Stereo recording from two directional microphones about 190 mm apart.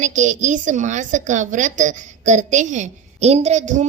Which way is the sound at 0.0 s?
40° right (ahead or behind).